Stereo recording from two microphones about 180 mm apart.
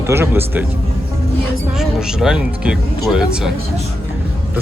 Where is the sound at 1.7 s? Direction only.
Centre (ahead or behind).